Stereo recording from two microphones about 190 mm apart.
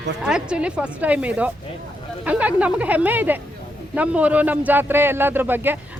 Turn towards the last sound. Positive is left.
turn(degrees=-10)  # may be behind; listen again after turning